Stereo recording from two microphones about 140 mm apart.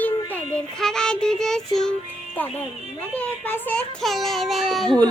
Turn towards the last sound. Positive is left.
turn(degrees=5)  # may be behind; listen again after turning